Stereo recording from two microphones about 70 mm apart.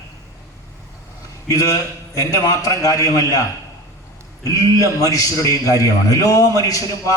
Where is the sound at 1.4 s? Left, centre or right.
Left.